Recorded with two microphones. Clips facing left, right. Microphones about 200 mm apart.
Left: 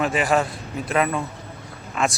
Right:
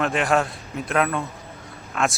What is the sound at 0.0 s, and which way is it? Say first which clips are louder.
Speech: left 1 dB; centre (ahead or behind).